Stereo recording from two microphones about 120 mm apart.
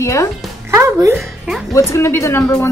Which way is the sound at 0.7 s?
25° right (ahead or behind).